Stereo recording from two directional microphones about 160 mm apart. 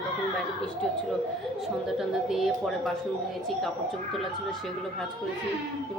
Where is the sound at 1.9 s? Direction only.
Centre (ahead or behind).